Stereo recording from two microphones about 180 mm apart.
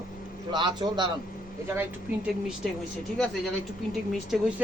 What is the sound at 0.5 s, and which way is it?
Speech, 25° right (ahead or behind).